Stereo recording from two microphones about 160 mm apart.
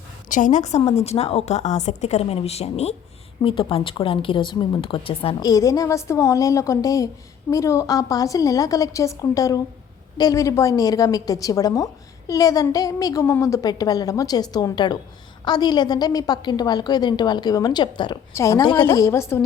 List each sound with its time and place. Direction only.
0.3 s a woman's voice: 55° left (ahead or behind); by 19.4 s 15° left (ahead or behind)